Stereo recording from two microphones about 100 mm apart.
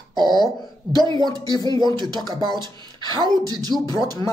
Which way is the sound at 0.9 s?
45° right (ahead or behind).